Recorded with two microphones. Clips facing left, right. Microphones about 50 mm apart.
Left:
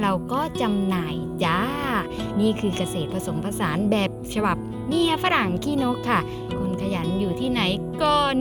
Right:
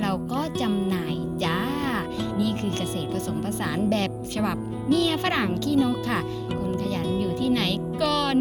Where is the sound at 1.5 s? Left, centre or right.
Left.